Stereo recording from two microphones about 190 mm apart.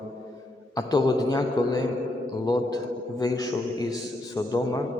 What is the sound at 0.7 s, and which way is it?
A man's voice, 20° left (ahead or behind).